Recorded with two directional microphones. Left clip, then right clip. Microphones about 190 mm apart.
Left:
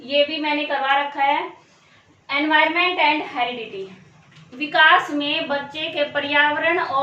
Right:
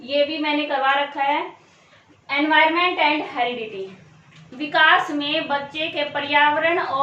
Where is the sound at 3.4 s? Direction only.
15° right (ahead or behind).